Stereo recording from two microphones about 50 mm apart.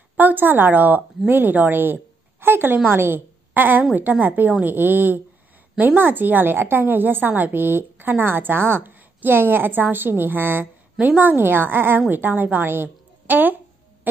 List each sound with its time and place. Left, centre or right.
0.2 s a woman's voice: right